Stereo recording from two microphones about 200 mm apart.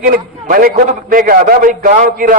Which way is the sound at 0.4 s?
45° right (ahead or behind).